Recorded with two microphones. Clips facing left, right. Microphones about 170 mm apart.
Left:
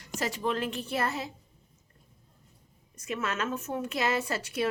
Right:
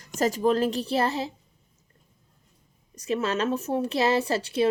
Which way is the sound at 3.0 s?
30° right (ahead or behind).